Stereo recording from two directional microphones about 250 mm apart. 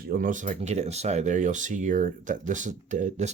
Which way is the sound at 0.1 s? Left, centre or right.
Right.